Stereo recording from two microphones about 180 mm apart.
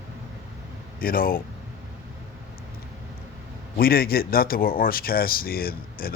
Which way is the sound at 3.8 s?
55° left (ahead or behind).